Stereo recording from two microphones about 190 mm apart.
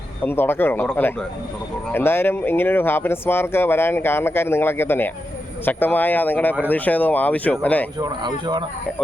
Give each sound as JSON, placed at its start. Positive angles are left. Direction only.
{"t": 0.3, "sound": "speech", "side_deg": 10}
{"t": 7.9, "sound": "speech", "side_deg": -20}